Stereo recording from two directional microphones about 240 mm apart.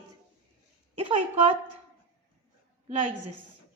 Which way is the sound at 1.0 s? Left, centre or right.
Right.